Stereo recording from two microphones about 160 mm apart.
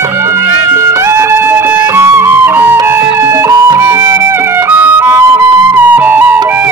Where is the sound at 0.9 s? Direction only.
15° right (ahead or behind).